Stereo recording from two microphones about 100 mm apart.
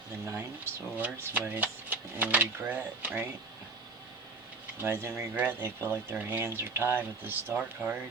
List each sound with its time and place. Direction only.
0.3 s speech: 20° right (ahead or behind)
4.8 s speech: 25° right (ahead or behind)